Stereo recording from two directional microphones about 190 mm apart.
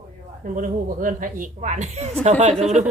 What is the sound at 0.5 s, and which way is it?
Music, 45° right (ahead or behind).